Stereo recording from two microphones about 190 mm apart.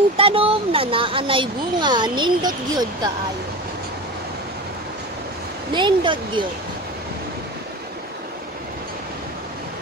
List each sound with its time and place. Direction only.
0.2 s speech: 30° right (ahead or behind)
5.7 s speech: 25° right (ahead or behind)